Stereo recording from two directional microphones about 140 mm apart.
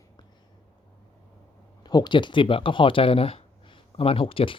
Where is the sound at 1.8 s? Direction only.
30° left (ahead or behind).